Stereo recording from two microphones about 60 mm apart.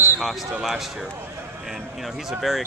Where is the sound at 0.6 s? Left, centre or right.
Centre.